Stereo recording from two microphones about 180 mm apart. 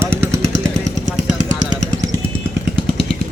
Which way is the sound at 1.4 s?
40° right (ahead or behind).